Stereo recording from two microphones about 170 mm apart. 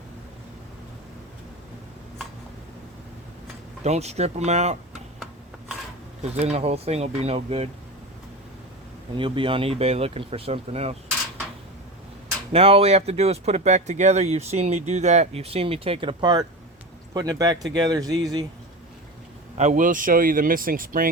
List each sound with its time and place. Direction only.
3.8 s speech: 40° right (ahead or behind)
6.3 s speech: 40° right (ahead or behind)
9.1 s speech: 30° right (ahead or behind)
12.5 s speech: 35° right (ahead or behind)
19.5 s speech: 45° right (ahead or behind)